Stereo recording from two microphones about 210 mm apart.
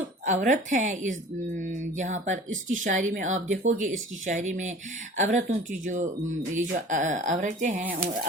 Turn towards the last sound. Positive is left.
turn(degrees=-40)  # may be behind; listen again after turning